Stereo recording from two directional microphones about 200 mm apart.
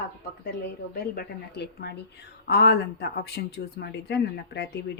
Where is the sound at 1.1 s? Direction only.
50° left (ahead or behind).